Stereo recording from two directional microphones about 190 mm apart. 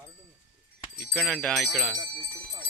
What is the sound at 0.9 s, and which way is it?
Speech, 5° left (ahead or behind).